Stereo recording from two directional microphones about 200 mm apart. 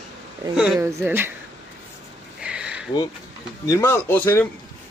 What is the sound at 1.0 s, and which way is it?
Speech, 10° right (ahead or behind).